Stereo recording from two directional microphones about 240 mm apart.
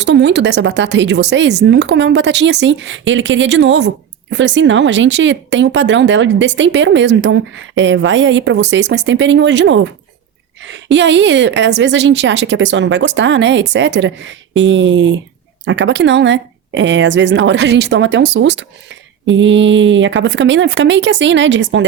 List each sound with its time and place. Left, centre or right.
0.0 s speech: right